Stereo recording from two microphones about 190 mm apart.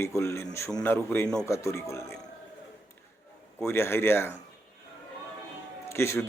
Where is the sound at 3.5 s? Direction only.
10° left (ahead or behind).